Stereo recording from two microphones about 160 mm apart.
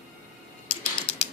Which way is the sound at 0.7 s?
35° left (ahead or behind).